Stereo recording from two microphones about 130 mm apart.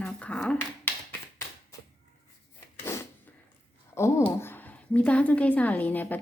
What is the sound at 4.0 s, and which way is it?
A woman's voice, 20° left (ahead or behind).